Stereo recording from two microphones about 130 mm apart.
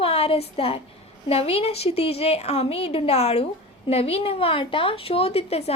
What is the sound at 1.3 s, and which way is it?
A woman's voice, 50° left (ahead or behind).